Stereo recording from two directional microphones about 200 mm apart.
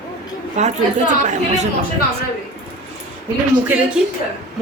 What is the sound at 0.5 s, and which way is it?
A woman's voice, 35° right (ahead or behind).